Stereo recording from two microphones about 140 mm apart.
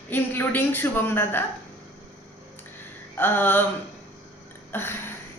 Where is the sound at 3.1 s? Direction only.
15° left (ahead or behind).